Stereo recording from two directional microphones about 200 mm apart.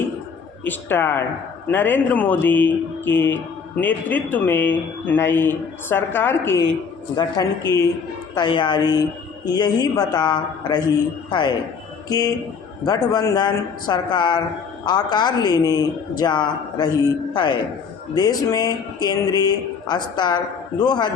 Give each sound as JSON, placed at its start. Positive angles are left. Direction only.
{"t": 0.6, "sound": "speech", "side_deg": 10}